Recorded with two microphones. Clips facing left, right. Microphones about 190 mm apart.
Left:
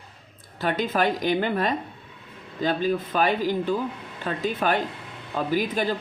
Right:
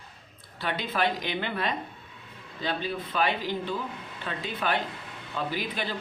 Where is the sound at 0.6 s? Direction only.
45° left (ahead or behind).